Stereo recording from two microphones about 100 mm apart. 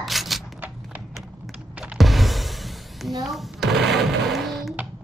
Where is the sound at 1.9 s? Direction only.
Centre (ahead or behind).